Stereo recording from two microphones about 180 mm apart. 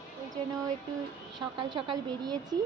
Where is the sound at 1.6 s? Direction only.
25° right (ahead or behind).